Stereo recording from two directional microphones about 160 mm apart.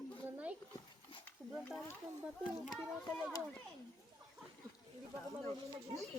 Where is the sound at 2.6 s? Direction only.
Centre (ahead or behind).